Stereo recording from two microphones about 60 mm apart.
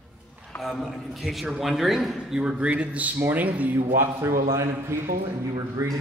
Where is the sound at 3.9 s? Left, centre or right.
Right.